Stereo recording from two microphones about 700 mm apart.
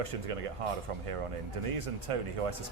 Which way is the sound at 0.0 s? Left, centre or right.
Right.